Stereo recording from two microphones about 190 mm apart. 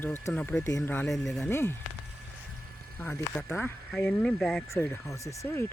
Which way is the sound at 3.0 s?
10° left (ahead or behind).